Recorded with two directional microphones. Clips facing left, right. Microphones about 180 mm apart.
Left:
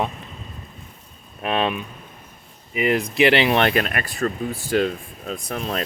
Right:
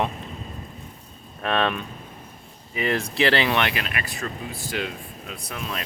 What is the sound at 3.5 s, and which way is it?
Speech, 45° left (ahead or behind).